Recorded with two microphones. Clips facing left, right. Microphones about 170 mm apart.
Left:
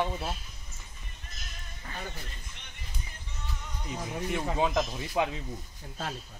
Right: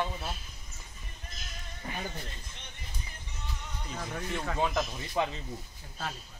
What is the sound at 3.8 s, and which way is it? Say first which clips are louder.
Speech: left 3 dB; 15° left (ahead or behind).